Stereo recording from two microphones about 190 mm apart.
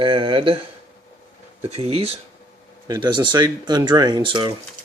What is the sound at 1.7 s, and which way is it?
A man's voice, 30° right (ahead or behind).